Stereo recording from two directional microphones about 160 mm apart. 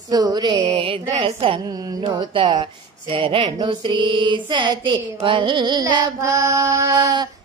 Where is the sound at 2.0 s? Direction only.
30° right (ahead or behind).